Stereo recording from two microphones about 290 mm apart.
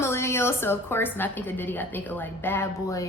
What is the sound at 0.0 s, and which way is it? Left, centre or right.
A woman's voice, centre.